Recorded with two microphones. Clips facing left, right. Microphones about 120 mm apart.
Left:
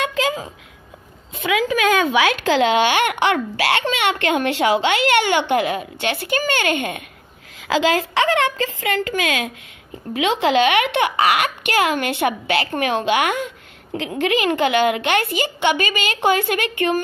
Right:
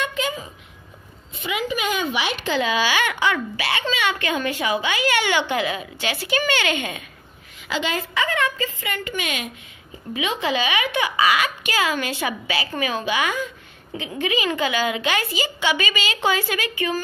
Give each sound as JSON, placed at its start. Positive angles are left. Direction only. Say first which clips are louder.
{"t": 0.0, "sound": "a sound", "louder": "left 5 dB", "side_deg": 90}
{"t": 1.4, "sound": "speech", "louder": "left 7 dB", "side_deg": 90}
{"t": 2.4, "sound": "a child's voice", "louder": "left 3 dB", "side_deg": 80}
{"t": 7.6, "sound": "a woman's voice", "louder": "left 7 dB", "side_deg": 90}
{"t": 10.1, "sound": "a child's voice", "louder": "left 7 dB", "side_deg": 75}
{"t": 13.9, "sound": "a child's voice", "louder": "left 5 dB", "side_deg": 80}